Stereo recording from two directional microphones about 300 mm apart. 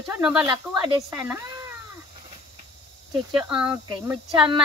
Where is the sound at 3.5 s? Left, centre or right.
Centre.